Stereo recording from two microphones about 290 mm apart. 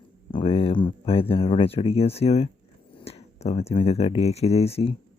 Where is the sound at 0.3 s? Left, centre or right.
Centre.